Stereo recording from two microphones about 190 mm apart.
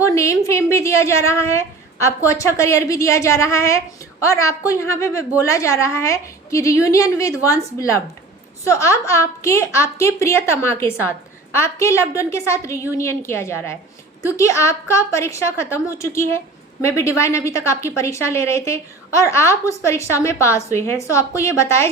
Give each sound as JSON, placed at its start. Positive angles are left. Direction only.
{"t": 0.0, "sound": "a woman's voice", "side_deg": 15}